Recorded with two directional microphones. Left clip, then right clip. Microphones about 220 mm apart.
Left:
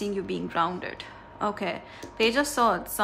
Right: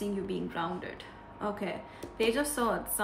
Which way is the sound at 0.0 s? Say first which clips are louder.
Left 4 dB; 25° left (ahead or behind).